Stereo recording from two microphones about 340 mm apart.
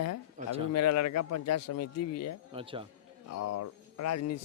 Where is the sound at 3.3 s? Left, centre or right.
Left.